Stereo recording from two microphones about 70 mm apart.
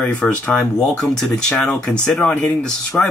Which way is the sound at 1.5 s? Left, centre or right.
Left.